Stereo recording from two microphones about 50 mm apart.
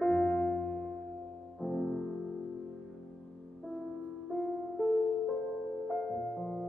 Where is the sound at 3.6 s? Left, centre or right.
Centre.